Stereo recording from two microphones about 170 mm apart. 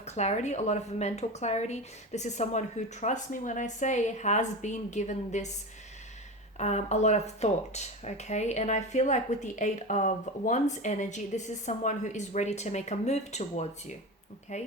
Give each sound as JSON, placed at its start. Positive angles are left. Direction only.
{"t": 0.0, "sound": "speech", "side_deg": 40}
{"t": 6.6, "sound": "speech", "side_deg": 40}